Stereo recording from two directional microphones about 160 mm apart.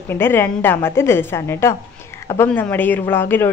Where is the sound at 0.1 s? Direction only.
15° left (ahead or behind).